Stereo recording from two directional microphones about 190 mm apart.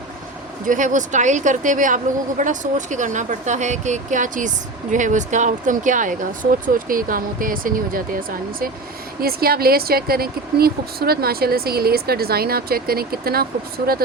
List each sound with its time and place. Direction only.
0.6 s speech: 40° right (ahead or behind)